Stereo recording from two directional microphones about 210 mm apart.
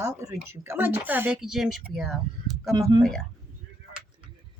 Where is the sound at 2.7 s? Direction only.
20° right (ahead or behind).